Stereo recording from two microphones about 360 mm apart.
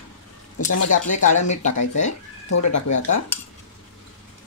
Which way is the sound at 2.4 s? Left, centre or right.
Left.